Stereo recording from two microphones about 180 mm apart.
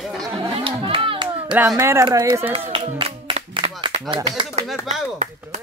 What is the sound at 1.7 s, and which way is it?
Speech, 15° right (ahead or behind).